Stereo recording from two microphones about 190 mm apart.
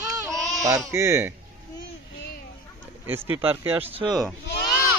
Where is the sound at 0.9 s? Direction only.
15° right (ahead or behind).